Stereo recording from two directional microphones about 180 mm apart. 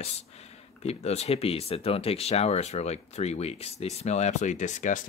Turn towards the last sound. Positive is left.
turn(degrees=45)  # may be behind; listen again after turning